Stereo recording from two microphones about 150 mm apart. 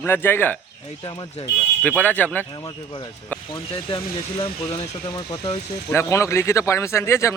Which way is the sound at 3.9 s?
40° left (ahead or behind).